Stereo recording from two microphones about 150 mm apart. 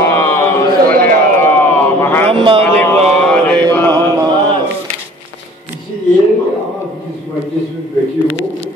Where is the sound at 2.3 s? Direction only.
35° right (ahead or behind).